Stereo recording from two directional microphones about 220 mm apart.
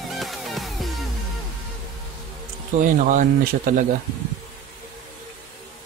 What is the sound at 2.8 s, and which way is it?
Speech, 35° right (ahead or behind).